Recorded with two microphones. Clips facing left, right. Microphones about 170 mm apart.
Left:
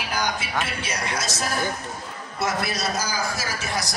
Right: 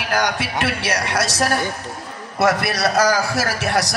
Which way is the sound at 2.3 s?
70° right (ahead or behind).